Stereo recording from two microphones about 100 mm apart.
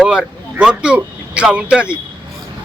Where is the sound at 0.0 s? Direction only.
10° right (ahead or behind).